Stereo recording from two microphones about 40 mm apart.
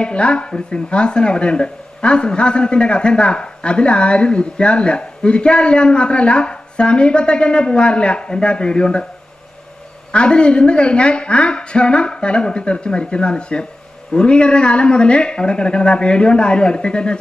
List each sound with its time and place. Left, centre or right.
0.0 s speech: left
10.1 s speech: left